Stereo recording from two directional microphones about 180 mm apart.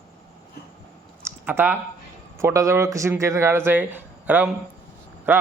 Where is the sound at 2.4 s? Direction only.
15° right (ahead or behind).